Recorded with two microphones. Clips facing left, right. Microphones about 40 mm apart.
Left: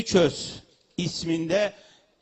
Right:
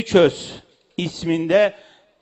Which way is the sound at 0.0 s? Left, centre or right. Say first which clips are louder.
Right 6 dB; right.